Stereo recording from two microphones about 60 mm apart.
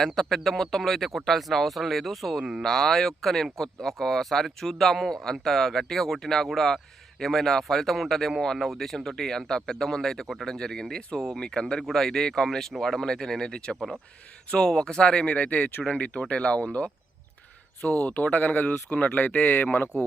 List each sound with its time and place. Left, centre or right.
0.0 s speech: centre; by 19.9 s left